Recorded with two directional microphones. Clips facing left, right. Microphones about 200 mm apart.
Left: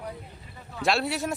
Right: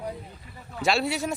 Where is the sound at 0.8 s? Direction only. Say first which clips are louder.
Right 1 dB; centre (ahead or behind).